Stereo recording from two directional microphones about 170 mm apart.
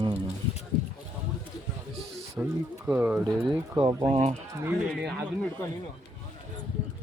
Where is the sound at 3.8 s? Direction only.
35° right (ahead or behind).